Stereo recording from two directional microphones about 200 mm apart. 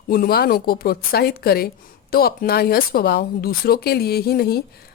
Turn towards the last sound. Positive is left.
turn(degrees=50)  # may be behind; listen again after turning